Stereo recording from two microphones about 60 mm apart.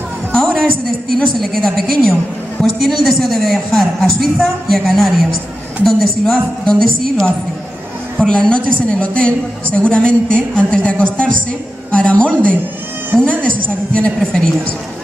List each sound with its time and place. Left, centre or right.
0.3 s a sound: centre
1.4 s a woman's voice: centre; by 12.5 s left
13.9 s a woman's voice: centre